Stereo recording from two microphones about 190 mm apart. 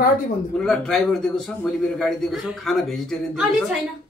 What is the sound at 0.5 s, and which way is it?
A man's voice, 5° left (ahead or behind).